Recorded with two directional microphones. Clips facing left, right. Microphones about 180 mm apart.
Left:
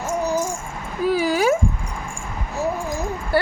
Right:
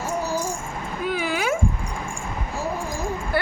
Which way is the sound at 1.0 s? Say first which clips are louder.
Left 7 dB; 35° left (ahead or behind).